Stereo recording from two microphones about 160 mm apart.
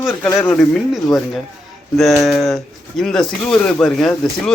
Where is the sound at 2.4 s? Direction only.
Centre (ahead or behind).